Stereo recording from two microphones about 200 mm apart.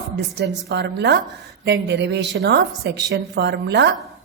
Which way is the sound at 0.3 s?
60° right (ahead or behind).